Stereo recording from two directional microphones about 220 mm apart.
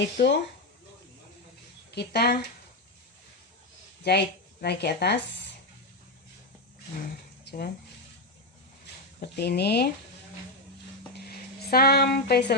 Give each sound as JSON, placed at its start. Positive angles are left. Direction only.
{"t": 0.2, "sound": "speech", "side_deg": 45}
{"t": 2.0, "sound": "speech", "side_deg": 45}
{"t": 4.0, "sound": "speech", "side_deg": 50}
{"t": 7.4, "sound": "a sound", "side_deg": 45}
{"t": 9.2, "sound": "speech", "side_deg": 50}
{"t": 11.1, "sound": "a sound", "side_deg": 45}